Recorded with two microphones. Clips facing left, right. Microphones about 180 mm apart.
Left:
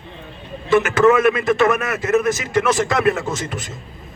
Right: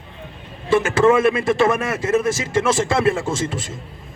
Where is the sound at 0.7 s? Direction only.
30° right (ahead or behind).